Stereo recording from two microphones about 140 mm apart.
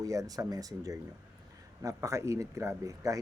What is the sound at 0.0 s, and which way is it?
Speech, 25° right (ahead or behind).